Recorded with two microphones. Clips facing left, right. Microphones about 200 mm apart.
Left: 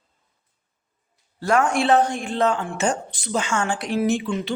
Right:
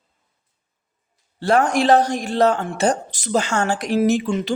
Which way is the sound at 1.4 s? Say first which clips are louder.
Right 3 dB; 35° right (ahead or behind).